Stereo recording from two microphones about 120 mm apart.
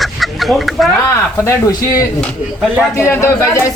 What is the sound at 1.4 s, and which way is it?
Speech, 25° left (ahead or behind).